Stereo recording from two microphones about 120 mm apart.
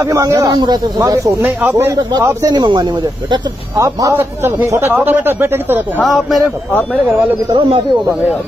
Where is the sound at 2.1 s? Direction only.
35° right (ahead or behind).